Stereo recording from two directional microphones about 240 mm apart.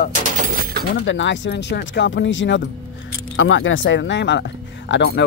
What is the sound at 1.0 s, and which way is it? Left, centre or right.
Speech, left.